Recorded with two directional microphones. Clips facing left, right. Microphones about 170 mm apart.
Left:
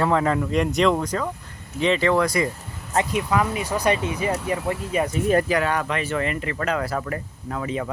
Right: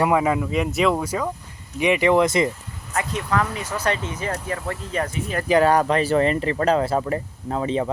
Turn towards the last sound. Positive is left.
turn(degrees=-30)  # may be behind; listen again after turning